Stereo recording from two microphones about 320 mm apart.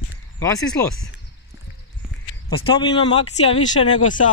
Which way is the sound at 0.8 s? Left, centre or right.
Centre.